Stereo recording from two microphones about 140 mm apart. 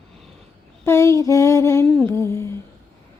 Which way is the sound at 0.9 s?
20° left (ahead or behind).